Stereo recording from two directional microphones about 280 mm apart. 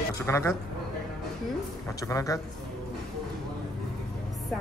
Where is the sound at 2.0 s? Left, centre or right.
Centre.